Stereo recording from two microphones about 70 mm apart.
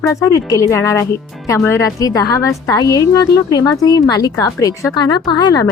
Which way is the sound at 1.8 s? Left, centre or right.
Left.